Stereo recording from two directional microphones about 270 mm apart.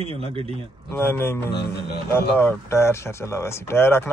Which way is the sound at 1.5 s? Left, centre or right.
Left.